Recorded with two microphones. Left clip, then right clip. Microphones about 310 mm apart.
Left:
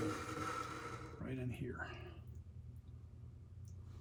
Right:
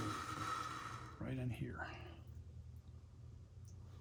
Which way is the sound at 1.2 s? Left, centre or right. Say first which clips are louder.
Left 1 dB; right.